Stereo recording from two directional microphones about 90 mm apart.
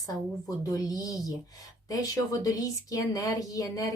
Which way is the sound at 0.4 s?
40° left (ahead or behind).